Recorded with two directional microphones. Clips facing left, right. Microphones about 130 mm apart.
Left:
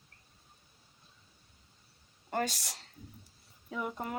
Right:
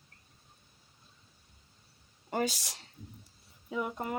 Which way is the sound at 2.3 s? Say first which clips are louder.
Right 2 dB; 5° right (ahead or behind).